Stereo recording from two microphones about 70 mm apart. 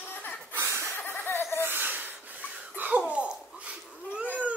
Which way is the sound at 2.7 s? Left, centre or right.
Right.